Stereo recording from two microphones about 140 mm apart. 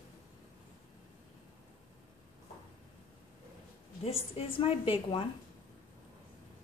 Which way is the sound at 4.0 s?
45° left (ahead or behind).